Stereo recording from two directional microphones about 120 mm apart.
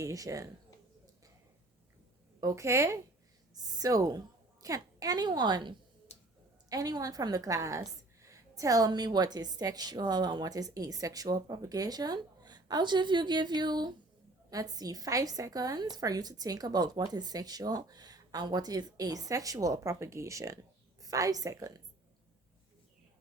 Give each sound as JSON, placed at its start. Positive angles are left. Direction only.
{"t": 0.0, "sound": "a woman's voice", "side_deg": -25}
{"t": 2.4, "sound": "a woman's voice", "side_deg": -25}
{"t": 6.1, "sound": "a sound", "side_deg": 65}
{"t": 6.7, "sound": "a woman's voice", "side_deg": -30}